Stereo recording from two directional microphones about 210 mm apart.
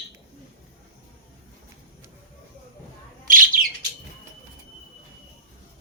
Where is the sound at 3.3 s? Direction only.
40° right (ahead or behind).